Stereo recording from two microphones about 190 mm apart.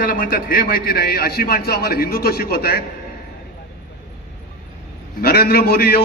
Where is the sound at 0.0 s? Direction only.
45° left (ahead or behind).